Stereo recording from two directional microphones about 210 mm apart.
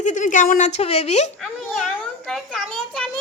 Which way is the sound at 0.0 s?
35° left (ahead or behind).